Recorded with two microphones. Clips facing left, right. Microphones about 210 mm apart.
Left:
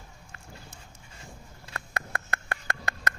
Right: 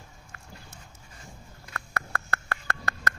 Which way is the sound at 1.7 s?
20° left (ahead or behind).